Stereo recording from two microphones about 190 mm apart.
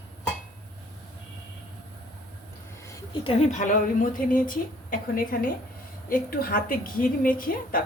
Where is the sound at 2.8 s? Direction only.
25° left (ahead or behind).